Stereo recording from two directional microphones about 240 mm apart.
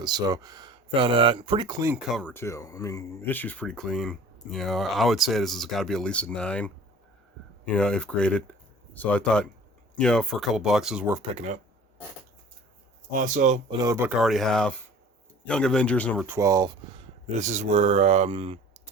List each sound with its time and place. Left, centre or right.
0.0 s speech: centre
11.2 s speech: right
13.1 s speech: right
13.7 s speech: centre
16.3 s speech: centre